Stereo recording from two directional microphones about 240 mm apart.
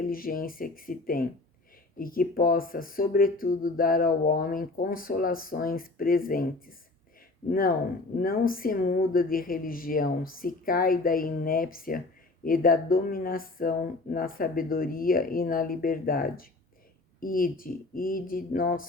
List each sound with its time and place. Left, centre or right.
0.0 s speech: left
8.2 s speech: left